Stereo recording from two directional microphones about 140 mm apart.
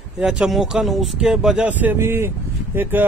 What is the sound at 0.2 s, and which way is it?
Speech, 5° right (ahead or behind).